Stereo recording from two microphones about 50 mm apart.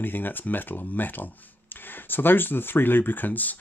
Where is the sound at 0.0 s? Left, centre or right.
Left.